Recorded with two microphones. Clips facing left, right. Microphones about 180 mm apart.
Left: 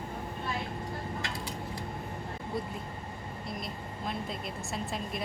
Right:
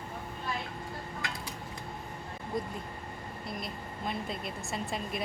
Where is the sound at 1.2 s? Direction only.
30° left (ahead or behind).